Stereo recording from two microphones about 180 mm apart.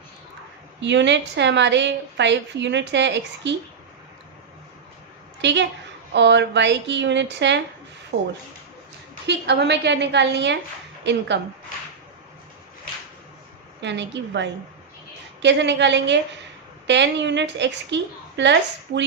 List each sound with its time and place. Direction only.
0.8 s a woman's voice: 80° right
5.4 s a woman's voice: 80° right
9.2 s a woman's voice: 70° right (ahead or behind)
13.8 s a woman's voice: 75° right (ahead or behind)